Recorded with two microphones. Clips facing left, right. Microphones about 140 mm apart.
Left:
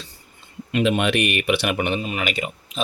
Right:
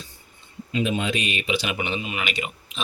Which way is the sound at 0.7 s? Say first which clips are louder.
Left 5 dB; 70° left (ahead or behind).